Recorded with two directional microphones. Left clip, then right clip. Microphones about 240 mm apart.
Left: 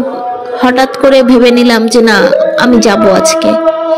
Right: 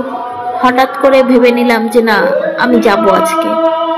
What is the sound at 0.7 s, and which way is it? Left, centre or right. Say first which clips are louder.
Speech: left 2 dB; left.